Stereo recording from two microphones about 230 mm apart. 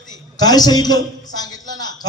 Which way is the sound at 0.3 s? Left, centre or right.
Centre.